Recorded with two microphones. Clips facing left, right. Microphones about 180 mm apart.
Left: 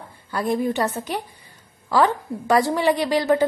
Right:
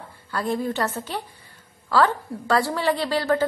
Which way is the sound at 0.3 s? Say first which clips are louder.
Left 3 dB; 15° left (ahead or behind).